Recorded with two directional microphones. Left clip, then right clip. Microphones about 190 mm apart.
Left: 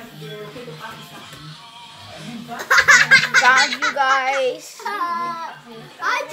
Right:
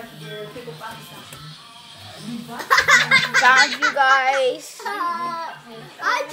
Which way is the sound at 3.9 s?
10° right (ahead or behind).